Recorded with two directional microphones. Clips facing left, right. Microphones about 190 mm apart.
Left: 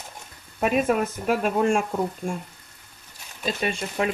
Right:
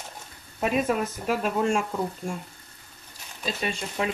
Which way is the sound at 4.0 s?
55° left (ahead or behind).